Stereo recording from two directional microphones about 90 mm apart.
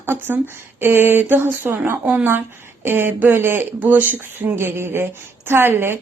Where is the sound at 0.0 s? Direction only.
25° right (ahead or behind).